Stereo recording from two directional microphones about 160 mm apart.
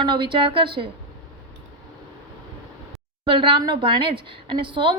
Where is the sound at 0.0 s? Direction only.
30° right (ahead or behind).